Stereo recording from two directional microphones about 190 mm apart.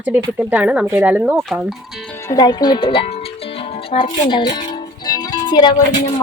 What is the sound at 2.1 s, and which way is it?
Music, 15° left (ahead or behind).